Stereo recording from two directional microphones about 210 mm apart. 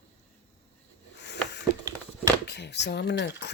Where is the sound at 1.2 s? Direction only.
55° left (ahead or behind).